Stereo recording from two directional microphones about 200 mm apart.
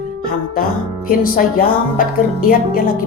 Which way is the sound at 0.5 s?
45° left (ahead or behind).